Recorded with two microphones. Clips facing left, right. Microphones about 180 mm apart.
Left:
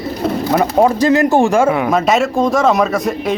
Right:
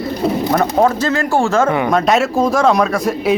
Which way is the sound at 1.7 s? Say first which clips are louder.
Even; centre (ahead or behind).